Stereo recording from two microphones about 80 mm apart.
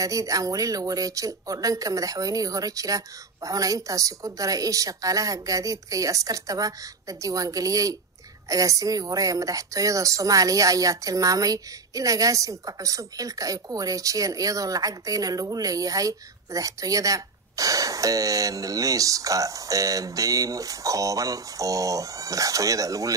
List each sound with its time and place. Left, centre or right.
0.0 s a woman's voice: right